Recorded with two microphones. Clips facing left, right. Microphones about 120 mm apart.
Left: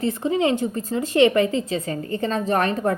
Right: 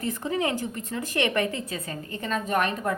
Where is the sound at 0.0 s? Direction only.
25° left (ahead or behind).